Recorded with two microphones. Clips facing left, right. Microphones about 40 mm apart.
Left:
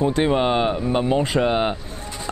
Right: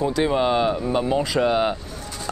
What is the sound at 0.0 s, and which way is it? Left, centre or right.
Speech, left.